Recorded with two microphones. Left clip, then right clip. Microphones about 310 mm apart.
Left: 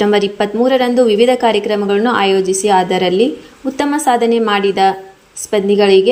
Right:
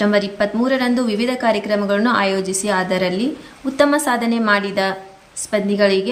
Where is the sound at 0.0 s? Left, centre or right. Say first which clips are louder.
Left 4 dB; centre.